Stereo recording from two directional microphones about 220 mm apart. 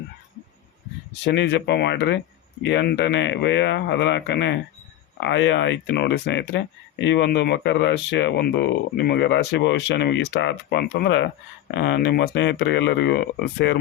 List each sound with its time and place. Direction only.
1.2 s speech: 50° left (ahead or behind)